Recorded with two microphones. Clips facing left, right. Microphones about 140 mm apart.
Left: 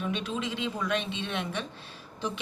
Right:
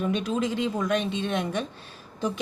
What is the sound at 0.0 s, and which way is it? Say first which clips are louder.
A woman's voice: right 6 dB; 40° right (ahead or behind).